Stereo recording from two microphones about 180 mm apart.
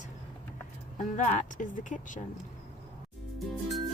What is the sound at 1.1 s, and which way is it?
Speech, 45° left (ahead or behind).